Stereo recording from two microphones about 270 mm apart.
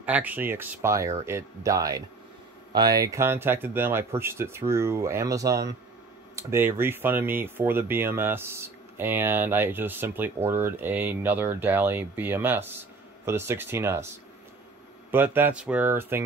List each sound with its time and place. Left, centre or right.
0.0 s speech: centre
15.0 s speech: centre